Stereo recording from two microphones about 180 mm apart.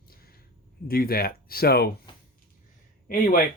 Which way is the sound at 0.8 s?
55° left (ahead or behind).